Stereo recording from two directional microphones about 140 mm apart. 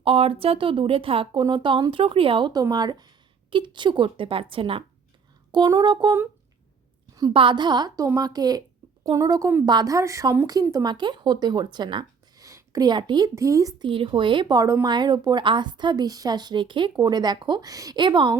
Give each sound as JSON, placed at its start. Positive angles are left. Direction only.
{"t": 0.0, "sound": "speech", "side_deg": -40}
{"t": 7.3, "sound": "speech", "side_deg": -35}